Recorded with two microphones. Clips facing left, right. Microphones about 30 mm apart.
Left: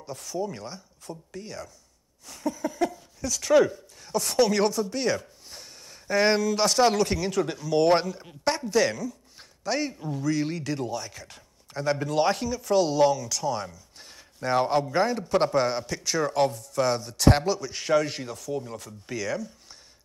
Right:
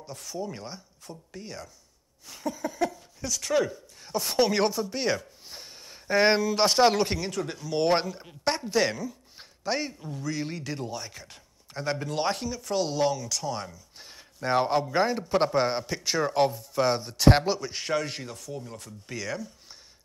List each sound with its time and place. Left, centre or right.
0.0 s speech: centre
4.0 s speech: centre
8.5 s a sound: centre
9.8 s speech: centre
10.5 s speech: centre
18.5 s speech: centre
19.0 s speech: centre